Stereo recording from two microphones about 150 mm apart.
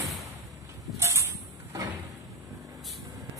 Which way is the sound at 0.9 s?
20° right (ahead or behind).